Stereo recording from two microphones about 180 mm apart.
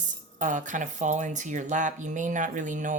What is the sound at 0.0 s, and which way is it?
Speech, 45° right (ahead or behind).